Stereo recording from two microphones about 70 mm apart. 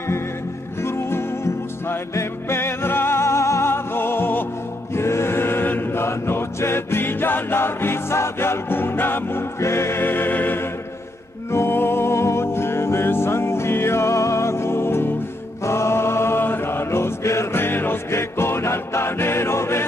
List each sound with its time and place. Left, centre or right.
0.8 s music: left
4.9 s choir: left
9.6 s music: left
15.6 s mantra: left